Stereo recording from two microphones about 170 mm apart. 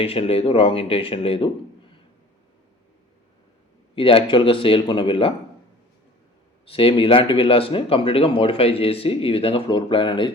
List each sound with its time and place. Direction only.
0.0 s speech: 35° left (ahead or behind)
3.9 s speech: 30° left (ahead or behind)
6.7 s speech: 30° left (ahead or behind)